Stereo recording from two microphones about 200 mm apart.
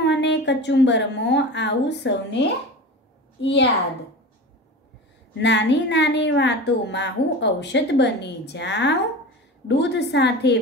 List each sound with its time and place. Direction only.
0.0 s a woman's voice: 60° left (ahead or behind)
5.4 s a woman's voice: 60° left (ahead or behind)